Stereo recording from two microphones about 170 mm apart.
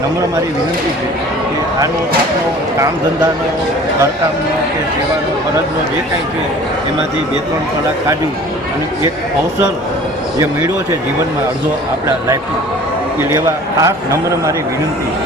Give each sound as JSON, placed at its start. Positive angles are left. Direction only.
{"t": 10.3, "sound": "speech", "side_deg": -20}
{"t": 13.8, "sound": "speech", "side_deg": -15}